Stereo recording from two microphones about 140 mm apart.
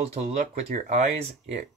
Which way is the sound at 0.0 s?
50° right (ahead or behind).